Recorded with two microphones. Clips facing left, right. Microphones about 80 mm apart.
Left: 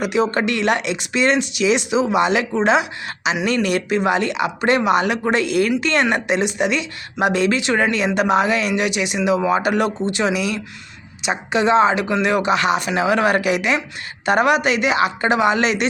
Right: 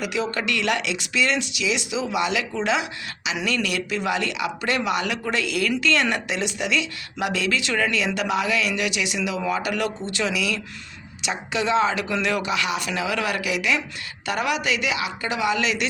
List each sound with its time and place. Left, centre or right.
0.0 s speech: left
2.6 s speech: left